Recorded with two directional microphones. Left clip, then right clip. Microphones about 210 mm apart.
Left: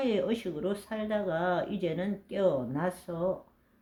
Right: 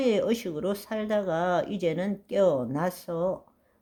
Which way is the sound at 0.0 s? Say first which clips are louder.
Right 4 dB; 40° right (ahead or behind).